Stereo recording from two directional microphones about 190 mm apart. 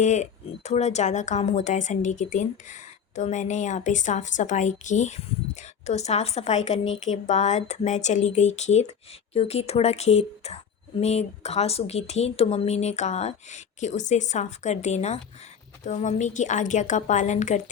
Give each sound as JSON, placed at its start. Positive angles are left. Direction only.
{"t": 0.0, "sound": "speech", "side_deg": 40}